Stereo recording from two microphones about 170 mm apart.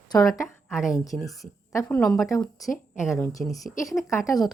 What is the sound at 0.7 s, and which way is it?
Speech, 5° right (ahead or behind).